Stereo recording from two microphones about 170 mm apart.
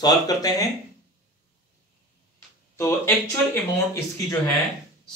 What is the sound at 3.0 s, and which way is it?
Speech, 10° left (ahead or behind).